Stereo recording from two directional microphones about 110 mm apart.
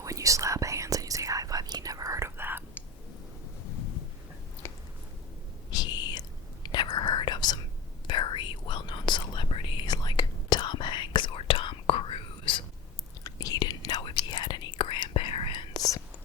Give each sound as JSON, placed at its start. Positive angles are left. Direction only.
{"t": 0.0, "sound": "whispering", "side_deg": -30}
{"t": 4.6, "sound": "chewing", "side_deg": 20}
{"t": 5.7, "sound": "whispering", "side_deg": 40}
{"t": 13.2, "sound": "whispering", "side_deg": 35}
{"t": 15.7, "sound": "whispering", "side_deg": 30}